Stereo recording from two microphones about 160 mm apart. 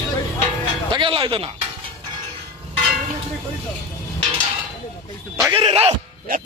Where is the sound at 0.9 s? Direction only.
30° right (ahead or behind).